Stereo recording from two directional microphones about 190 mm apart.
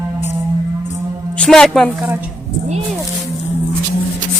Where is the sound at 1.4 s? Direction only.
5° left (ahead or behind).